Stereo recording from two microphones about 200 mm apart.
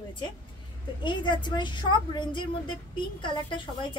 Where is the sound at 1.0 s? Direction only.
25° left (ahead or behind).